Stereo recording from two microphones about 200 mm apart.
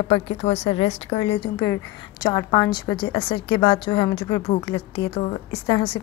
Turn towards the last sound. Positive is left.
turn(degrees=25)  # may be behind; listen again after turning